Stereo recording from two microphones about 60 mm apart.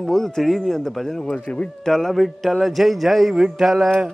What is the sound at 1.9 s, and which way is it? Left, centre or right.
A man's voice, centre.